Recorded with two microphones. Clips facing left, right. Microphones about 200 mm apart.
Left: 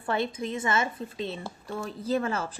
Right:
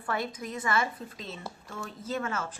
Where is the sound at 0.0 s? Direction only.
25° left (ahead or behind).